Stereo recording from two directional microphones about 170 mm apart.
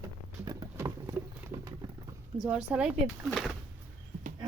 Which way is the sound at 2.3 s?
5° right (ahead or behind).